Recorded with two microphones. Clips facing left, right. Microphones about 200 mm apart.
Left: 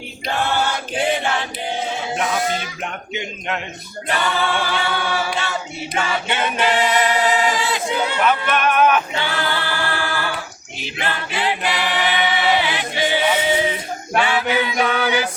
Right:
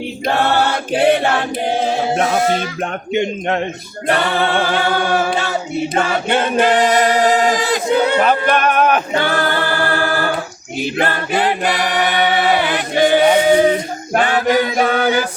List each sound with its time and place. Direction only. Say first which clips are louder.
0.3 s choir: right 5 dB; 60° right (ahead or behind)
2.1 s a sound: right 3 dB; 55° right (ahead or behind)
4.0 s a capella: right 5 dB; 60° right (ahead or behind)
10.8 s choir: right 8 dB; 50° right (ahead or behind)